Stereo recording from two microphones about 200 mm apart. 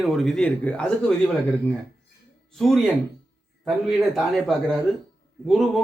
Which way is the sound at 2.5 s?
Centre (ahead or behind).